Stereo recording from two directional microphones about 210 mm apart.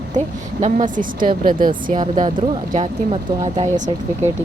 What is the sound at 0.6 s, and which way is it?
Speech, 40° right (ahead or behind).